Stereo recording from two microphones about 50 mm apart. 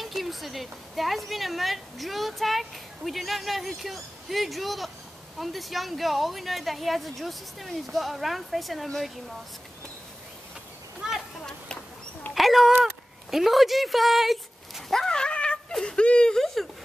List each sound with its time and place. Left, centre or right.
0.0 s a woman's voice: centre
11.0 s a sound: centre
12.4 s a sound: centre
12.8 s speech: centre
15.0 s dog: centre
15.8 s speech: left
16.3 s speech: centre